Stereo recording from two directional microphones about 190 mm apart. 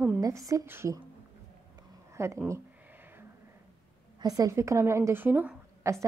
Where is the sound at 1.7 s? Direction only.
15° right (ahead or behind).